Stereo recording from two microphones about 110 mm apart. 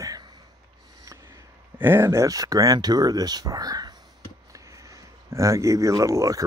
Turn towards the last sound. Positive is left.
turn(degrees=-30)  # may be behind; listen again after turning